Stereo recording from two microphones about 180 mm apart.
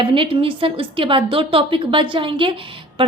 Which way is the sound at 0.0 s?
30° right (ahead or behind).